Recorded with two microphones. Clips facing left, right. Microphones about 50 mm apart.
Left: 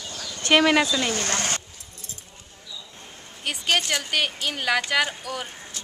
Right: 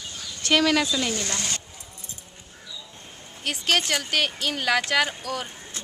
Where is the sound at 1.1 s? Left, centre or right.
Left.